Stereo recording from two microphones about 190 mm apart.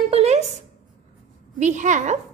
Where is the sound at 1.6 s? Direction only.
40° right (ahead or behind).